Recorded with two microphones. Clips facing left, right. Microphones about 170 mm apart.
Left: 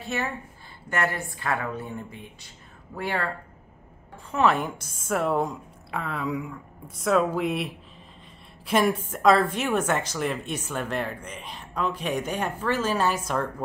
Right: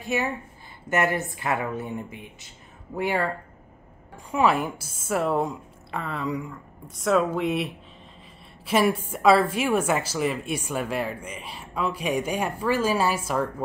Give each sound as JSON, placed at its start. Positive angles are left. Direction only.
{"t": 0.0, "sound": "a woman's voice", "side_deg": -15}
{"t": 4.3, "sound": "a woman's voice", "side_deg": -10}